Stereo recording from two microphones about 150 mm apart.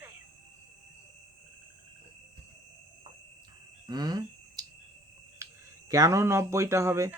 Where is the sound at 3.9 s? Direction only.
25° right (ahead or behind).